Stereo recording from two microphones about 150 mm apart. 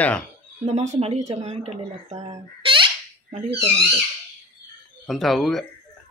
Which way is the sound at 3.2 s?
50° right (ahead or behind).